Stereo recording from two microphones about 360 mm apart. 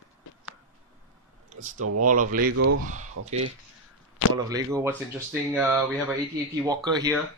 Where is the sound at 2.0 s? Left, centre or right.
Right.